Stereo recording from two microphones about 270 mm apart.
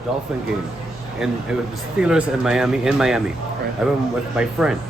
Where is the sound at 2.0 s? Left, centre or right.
Centre.